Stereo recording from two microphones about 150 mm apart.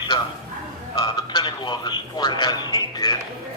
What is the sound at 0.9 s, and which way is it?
Speech, 35° left (ahead or behind).